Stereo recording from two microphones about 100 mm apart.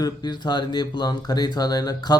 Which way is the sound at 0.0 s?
45° left (ahead or behind).